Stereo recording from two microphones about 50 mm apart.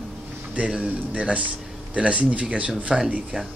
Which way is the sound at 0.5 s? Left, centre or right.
Right.